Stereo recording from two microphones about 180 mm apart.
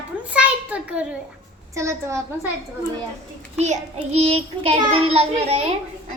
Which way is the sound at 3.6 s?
40° right (ahead or behind).